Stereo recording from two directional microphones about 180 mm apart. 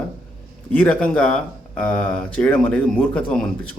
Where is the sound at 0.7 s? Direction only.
5° left (ahead or behind).